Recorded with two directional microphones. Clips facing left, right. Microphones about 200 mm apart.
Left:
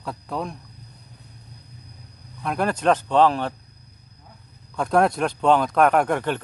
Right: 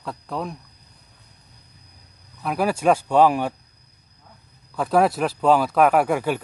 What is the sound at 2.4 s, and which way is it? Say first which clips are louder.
A man's voice: right 1 dB; 5° right (ahead or behind).